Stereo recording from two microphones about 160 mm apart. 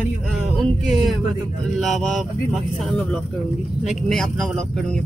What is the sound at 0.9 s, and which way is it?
Speech, centre (ahead or behind).